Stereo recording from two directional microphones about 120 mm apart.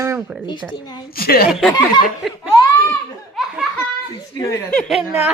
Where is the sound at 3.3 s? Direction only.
5° right (ahead or behind).